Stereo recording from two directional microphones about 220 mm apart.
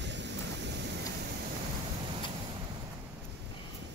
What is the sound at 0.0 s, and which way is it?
Thunder, 55° right (ahead or behind).